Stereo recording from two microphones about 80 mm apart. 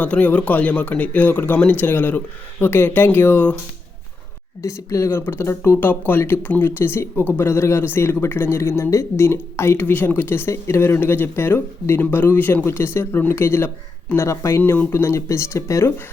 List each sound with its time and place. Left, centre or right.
0.0 s speech: centre
4.6 s speech: left
5.1 s speech: left
9.8 s speech: left